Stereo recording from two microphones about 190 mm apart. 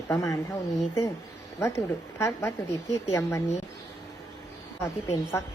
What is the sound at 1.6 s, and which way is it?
Speech, 15° left (ahead or behind).